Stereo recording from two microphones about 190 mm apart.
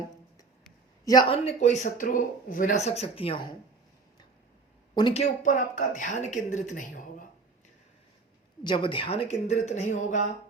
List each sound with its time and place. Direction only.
1.0 s speech: 20° left (ahead or behind)
4.9 s speech: 25° left (ahead or behind)
5.2 s speech: 40° left (ahead or behind)
8.6 s speech: 25° left (ahead or behind)